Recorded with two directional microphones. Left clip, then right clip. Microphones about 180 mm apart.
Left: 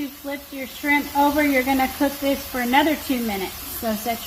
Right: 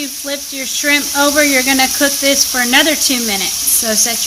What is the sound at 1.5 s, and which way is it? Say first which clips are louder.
Speech: right 8 dB; 85° right.